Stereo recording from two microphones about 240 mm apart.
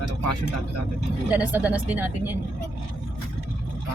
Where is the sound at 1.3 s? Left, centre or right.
Centre.